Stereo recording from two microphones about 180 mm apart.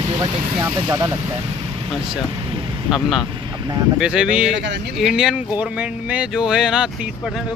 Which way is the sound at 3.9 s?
5° right (ahead or behind).